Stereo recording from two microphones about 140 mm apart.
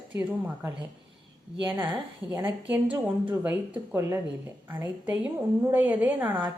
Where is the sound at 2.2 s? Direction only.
25° right (ahead or behind).